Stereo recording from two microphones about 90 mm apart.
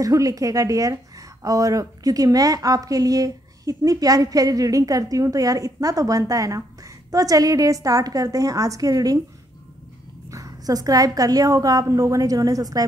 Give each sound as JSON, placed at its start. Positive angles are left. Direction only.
{"t": 0.0, "sound": "a woman's voice", "side_deg": -40}
{"t": 10.3, "sound": "a woman's voice", "side_deg": -40}